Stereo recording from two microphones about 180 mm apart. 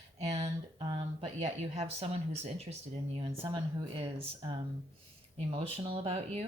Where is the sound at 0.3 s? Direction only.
35° right (ahead or behind).